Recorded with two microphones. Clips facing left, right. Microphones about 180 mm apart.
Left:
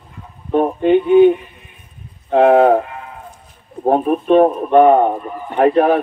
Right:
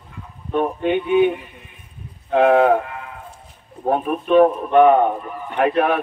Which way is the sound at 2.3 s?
35° left (ahead or behind).